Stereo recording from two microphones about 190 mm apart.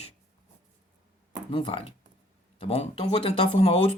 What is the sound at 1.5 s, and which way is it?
Speech, 30° left (ahead or behind).